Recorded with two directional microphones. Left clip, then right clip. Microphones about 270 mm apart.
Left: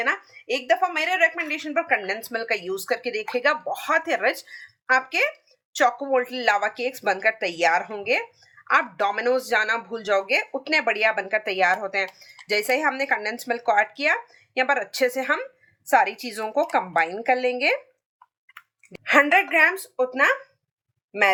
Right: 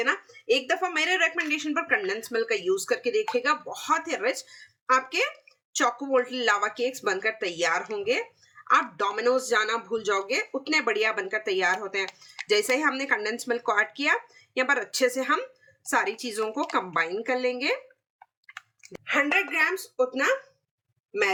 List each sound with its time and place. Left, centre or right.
0.0 s speech: centre
19.0 s a woman's voice: centre